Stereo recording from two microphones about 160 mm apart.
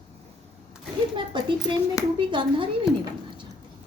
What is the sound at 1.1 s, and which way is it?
A woman's voice, 30° right (ahead or behind).